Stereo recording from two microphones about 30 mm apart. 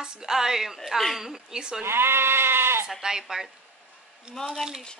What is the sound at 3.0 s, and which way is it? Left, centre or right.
Speech, centre.